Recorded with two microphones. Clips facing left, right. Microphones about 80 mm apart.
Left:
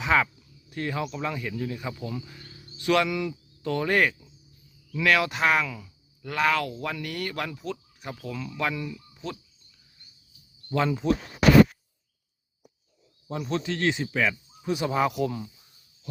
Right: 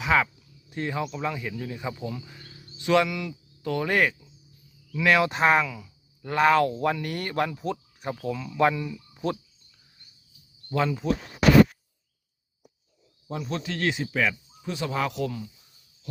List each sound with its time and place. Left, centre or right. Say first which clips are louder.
0.0 s speech: even; centre
0.7 s speech: right 1 dB; centre
1.1 s speech: even; centre
2.2 s insect: even; centre
2.7 s speech: right 1 dB; centre
3.1 s speech: left 4 dB; centre
5.0 s speech: right 2 dB; right
5.6 s speech: even; centre
6.2 s speech: right 5 dB; right
8.3 s speech: right 7 dB; centre
10.7 s speech: left 1 dB; centre
13.5 s speech: left 2 dB; centre
14.7 s speech: left 3 dB; centre